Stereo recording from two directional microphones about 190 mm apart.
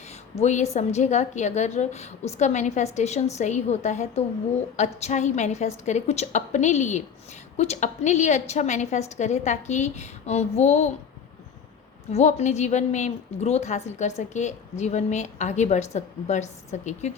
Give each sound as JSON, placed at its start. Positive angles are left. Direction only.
{"t": 0.3, "sound": "a woman's voice", "side_deg": 35}
{"t": 12.1, "sound": "a woman's voice", "side_deg": 35}